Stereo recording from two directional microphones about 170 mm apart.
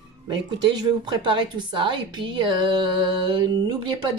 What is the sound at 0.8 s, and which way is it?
A woman's voice, 30° right (ahead or behind).